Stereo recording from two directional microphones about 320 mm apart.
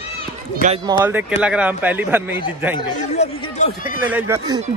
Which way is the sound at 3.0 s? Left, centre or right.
Centre.